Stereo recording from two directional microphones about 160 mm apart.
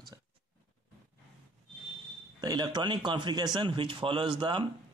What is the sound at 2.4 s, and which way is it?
A man's voice, 25° right (ahead or behind).